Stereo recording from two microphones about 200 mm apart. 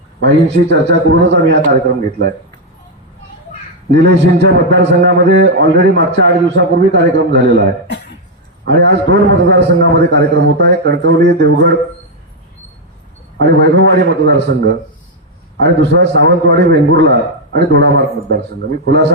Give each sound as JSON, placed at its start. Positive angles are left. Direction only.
{"t": 0.3, "sound": "a man's voice", "side_deg": -60}
{"t": 3.9, "sound": "a man's voice", "side_deg": -60}
{"t": 13.4, "sound": "a man's voice", "side_deg": -60}